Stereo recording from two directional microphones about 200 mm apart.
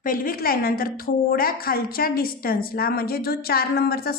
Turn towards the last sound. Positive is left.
turn(degrees=50)  # may be behind; listen again after turning